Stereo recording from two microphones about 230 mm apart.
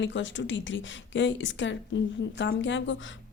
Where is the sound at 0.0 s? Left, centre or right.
Left.